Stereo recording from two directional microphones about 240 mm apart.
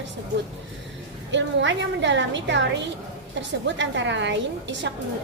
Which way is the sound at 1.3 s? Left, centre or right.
Right.